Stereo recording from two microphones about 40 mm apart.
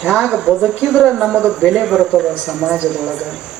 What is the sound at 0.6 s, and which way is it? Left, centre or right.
Speech, centre.